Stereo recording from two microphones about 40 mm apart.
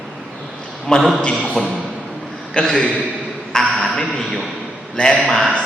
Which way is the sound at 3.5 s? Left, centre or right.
Centre.